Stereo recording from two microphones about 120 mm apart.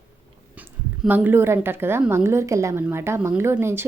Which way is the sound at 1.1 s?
20° right (ahead or behind).